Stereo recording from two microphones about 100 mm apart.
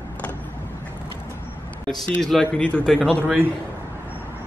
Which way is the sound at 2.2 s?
5° left (ahead or behind).